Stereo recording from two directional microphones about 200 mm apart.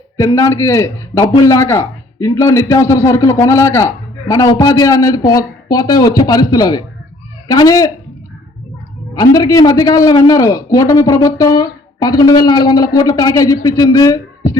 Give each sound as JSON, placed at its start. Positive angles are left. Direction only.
{"t": 0.2, "sound": "a man's voice", "side_deg": 15}
{"t": 9.1, "sound": "a man's voice", "side_deg": 20}